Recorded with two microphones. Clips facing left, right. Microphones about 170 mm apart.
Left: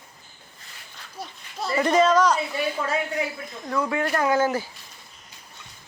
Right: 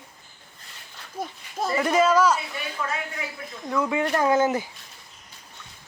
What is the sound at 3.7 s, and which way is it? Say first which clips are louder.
Speech: right 1 dB; centre (ahead or behind).